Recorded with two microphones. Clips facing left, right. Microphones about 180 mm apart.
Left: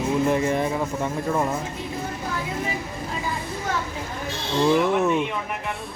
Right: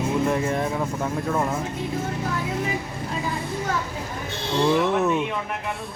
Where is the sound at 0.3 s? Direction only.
Centre (ahead or behind).